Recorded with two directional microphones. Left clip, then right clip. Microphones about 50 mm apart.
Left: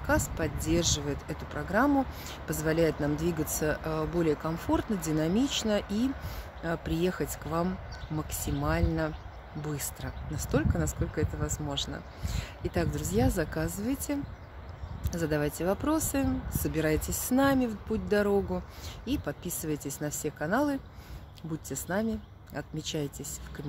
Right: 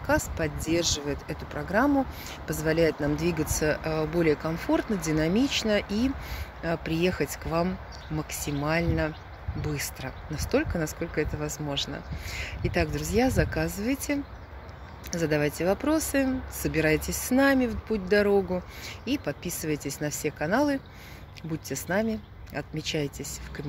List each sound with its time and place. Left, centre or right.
0.0 s speech: left
1.9 s speech: left
8.2 s speech: left
8.6 s speech: left
11.0 s speech: left
12.3 s speech: left